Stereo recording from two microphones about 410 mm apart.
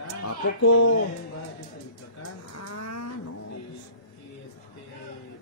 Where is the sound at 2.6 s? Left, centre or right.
Left.